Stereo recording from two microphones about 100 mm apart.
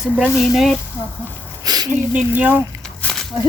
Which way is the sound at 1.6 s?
40° right (ahead or behind).